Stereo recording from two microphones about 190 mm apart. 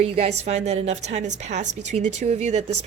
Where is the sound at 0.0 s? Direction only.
35° right (ahead or behind).